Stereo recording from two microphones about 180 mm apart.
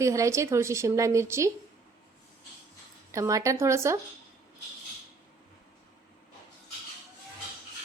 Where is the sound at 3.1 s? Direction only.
15° right (ahead or behind).